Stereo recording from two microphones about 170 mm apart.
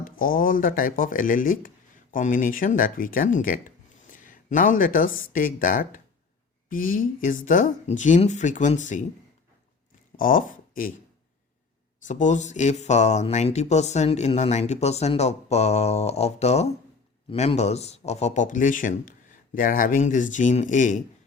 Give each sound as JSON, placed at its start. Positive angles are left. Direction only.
{"t": 0.0, "sound": "speech", "side_deg": 55}
{"t": 10.2, "sound": "speech", "side_deg": 55}
{"t": 12.0, "sound": "speech", "side_deg": 45}